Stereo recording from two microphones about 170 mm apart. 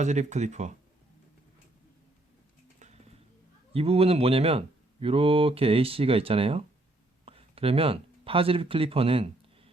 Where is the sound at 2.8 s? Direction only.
40° right (ahead or behind).